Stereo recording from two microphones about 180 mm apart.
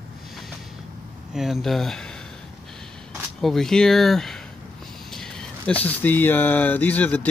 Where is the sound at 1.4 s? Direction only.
Centre (ahead or behind).